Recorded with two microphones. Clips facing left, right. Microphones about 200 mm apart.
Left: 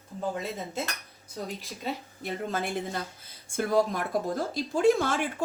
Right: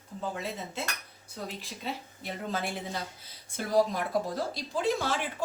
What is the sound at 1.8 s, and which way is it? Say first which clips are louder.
Speech: left 3 dB; 50° left (ahead or behind).